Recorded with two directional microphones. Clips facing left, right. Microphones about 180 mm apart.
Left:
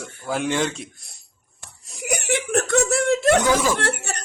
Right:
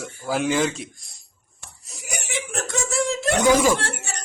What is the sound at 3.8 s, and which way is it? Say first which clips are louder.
Speech: left 6 dB; 60° left (ahead or behind).